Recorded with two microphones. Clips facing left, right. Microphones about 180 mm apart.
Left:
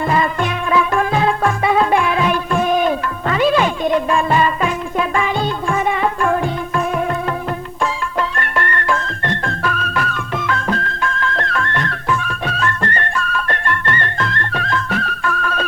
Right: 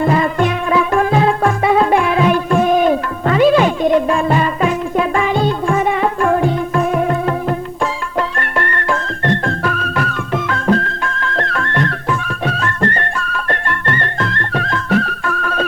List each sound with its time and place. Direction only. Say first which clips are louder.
0.0 s music: right 3 dB; 45° right (ahead or behind)
8.4 s music: right 1 dB; 40° right (ahead or behind)